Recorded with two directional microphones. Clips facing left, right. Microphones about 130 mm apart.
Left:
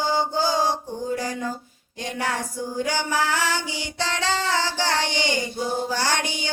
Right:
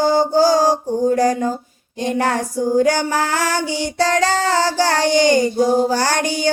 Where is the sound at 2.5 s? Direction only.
45° right (ahead or behind).